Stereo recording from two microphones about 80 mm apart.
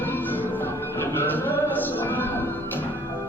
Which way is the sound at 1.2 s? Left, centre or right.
Left.